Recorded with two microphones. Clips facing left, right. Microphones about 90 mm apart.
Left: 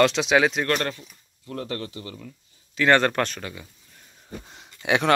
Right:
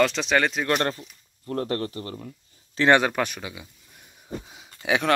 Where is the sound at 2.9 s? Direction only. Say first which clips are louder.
Even; 10° right (ahead or behind).